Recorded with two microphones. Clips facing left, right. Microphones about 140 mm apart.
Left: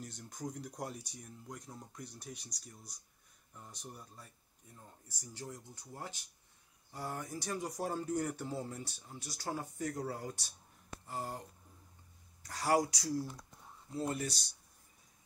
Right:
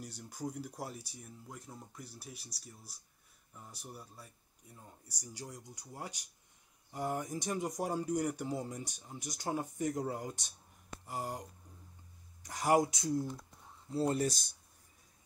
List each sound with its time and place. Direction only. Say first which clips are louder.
0.0 s speech: right 2 dB; 10° right (ahead or behind)
12.4 s speech: right 2 dB; 20° right (ahead or behind)
13.9 s speech: right 5 dB; 35° right (ahead or behind)